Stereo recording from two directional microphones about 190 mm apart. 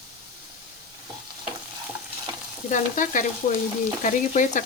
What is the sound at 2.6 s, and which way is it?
Speech, 45° left (ahead or behind).